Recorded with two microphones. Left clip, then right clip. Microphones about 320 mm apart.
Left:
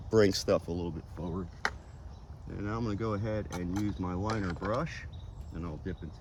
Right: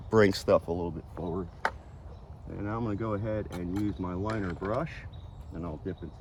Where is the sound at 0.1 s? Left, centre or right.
Right.